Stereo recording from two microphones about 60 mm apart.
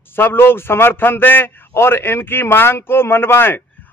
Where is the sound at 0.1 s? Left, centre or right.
Left.